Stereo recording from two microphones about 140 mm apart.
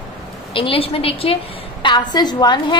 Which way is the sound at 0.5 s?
40° left (ahead or behind).